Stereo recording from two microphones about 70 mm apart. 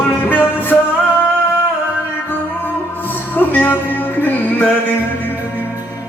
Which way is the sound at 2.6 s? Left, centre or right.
Left.